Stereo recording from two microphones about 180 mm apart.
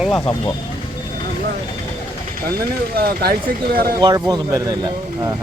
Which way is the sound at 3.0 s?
55° right (ahead or behind).